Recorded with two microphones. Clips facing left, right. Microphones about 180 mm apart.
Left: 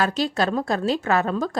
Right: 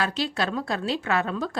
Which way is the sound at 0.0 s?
45° left (ahead or behind).